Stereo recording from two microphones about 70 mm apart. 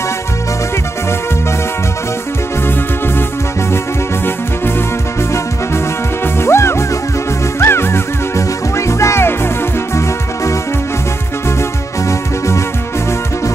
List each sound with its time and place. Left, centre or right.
6.4 s music: left